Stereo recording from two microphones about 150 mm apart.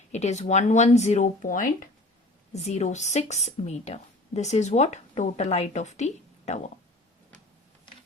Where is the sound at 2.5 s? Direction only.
50° left (ahead or behind).